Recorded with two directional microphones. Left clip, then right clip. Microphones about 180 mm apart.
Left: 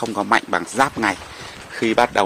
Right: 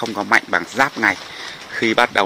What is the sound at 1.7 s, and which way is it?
Speech, centre (ahead or behind).